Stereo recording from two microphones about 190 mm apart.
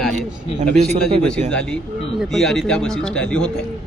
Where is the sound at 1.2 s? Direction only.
5° left (ahead or behind).